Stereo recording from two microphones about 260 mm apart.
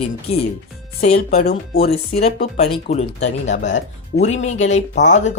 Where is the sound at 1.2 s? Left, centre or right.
Left.